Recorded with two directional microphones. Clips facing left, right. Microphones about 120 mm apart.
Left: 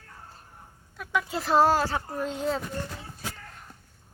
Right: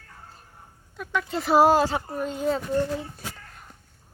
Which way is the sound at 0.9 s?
5° left (ahead or behind).